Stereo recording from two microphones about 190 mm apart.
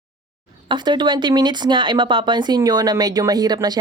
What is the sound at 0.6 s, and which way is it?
Speech, 25° right (ahead or behind).